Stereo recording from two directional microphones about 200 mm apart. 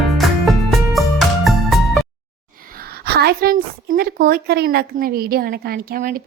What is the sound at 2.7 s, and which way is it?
A woman's voice, 50° right (ahead or behind).